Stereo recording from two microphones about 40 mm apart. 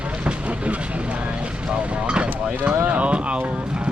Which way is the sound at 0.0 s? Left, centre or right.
Right.